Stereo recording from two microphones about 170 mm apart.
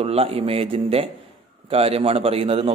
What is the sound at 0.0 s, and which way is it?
A man's voice, 35° right (ahead or behind).